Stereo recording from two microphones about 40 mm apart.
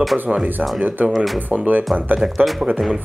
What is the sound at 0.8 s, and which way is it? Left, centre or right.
Speech, right.